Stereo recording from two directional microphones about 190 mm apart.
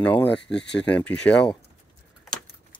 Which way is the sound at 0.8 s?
5° left (ahead or behind).